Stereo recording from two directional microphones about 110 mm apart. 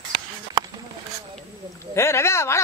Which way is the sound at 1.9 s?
25° left (ahead or behind).